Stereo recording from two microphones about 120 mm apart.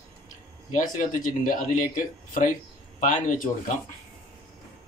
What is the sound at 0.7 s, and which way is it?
Speech, 90° left.